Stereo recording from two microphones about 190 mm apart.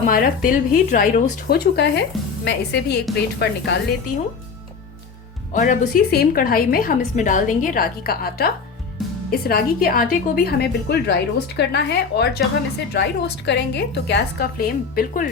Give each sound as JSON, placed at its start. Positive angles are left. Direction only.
{"t": 0.0, "sound": "a woman's voice", "side_deg": 45}
{"t": 1.5, "sound": "a woman's voice", "side_deg": 60}
{"t": 5.5, "sound": "a woman's voice", "side_deg": 40}